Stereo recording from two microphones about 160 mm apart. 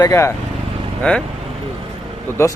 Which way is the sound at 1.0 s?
5° left (ahead or behind).